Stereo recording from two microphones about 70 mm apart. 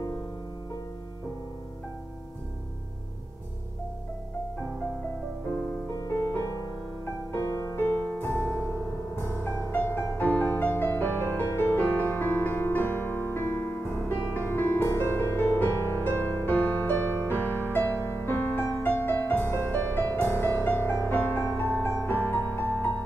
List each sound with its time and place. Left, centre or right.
5.9 s music: left
7.8 s music: left